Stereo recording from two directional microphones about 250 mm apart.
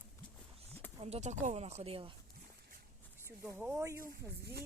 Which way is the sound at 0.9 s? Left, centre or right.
Right.